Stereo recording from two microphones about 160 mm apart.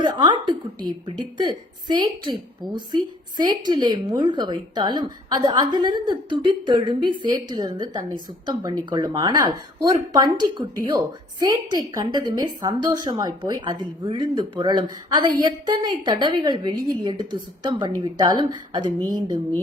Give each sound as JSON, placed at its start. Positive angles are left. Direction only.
{"t": 0.0, "sound": "a woman's voice", "side_deg": -30}